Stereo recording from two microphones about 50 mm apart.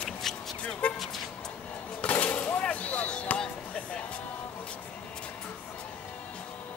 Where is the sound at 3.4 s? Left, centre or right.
Left.